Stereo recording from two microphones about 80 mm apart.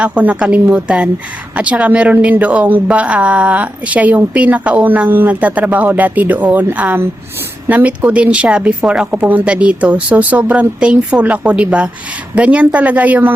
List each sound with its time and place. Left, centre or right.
0.0 s a woman's voice: centre